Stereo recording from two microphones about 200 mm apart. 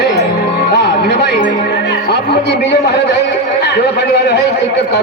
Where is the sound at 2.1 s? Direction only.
55° left (ahead or behind).